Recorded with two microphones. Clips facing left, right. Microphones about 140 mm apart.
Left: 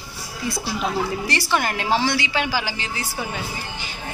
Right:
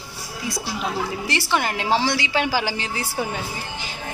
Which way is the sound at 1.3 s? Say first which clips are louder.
Even; 20° right (ahead or behind).